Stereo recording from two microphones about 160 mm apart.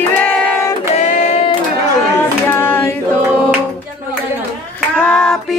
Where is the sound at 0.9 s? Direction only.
50° left (ahead or behind).